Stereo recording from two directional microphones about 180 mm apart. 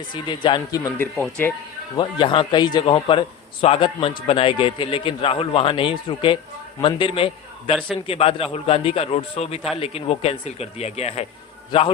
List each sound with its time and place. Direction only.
0.1 s a man's voice: 25° left (ahead or behind)
0.8 s speech: 15° left (ahead or behind)
2.0 s a man's voice: 25° left (ahead or behind)